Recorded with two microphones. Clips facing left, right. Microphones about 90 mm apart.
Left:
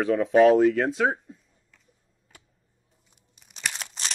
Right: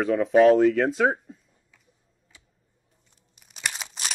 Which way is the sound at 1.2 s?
Centre (ahead or behind).